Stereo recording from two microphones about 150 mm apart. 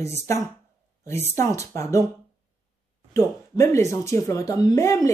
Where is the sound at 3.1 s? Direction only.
20° left (ahead or behind).